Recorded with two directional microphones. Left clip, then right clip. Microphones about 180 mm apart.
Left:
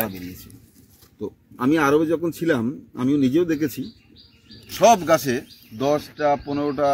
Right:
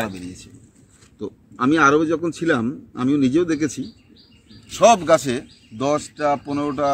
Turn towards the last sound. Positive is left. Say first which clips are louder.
# even
turn(degrees=15)  # may be behind; listen again after turning